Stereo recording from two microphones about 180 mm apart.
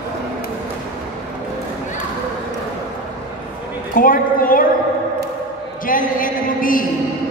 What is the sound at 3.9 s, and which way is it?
Speech, 50° left (ahead or behind).